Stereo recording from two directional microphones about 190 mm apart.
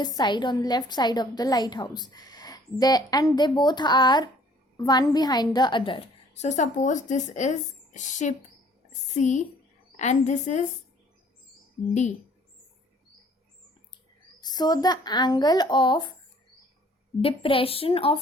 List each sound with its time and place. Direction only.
0.0 s a woman's voice: 25° left (ahead or behind); by 10.7 s 40° left (ahead or behind)
14.4 s a woman's voice: 20° left (ahead or behind)
17.2 s a woman's voice: 30° left (ahead or behind)